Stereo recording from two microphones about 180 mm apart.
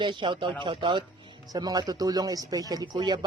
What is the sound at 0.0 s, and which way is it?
Speech, 25° right (ahead or behind).